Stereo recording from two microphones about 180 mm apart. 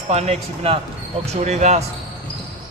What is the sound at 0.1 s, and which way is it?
Speech, 35° right (ahead or behind).